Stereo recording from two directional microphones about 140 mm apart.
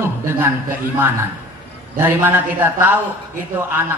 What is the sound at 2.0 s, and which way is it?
Speech, 15° right (ahead or behind).